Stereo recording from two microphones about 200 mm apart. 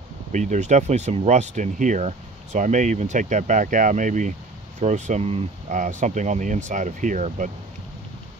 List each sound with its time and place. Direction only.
0.3 s speech: 35° right (ahead or behind)